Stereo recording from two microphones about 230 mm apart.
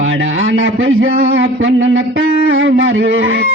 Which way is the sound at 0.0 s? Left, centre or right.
Right.